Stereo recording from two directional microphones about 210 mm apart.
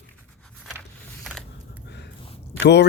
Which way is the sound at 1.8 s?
55° left (ahead or behind).